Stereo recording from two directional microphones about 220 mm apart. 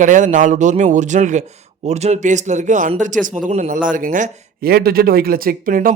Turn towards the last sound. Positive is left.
turn(degrees=-40)  # may be behind; listen again after turning